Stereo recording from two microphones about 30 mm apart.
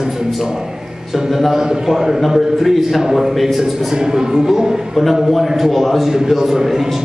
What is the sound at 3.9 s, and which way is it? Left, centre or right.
Speech, right.